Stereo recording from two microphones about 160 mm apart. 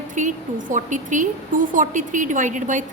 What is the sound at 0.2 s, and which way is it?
A woman's voice, 50° right (ahead or behind).